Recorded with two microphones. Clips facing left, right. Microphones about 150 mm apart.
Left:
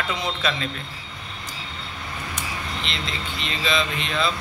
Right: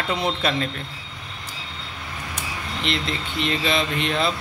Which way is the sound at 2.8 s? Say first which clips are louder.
Right 4 dB; 60° right (ahead or behind).